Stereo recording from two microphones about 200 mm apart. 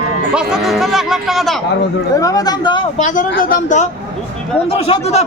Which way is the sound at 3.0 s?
40° left (ahead or behind).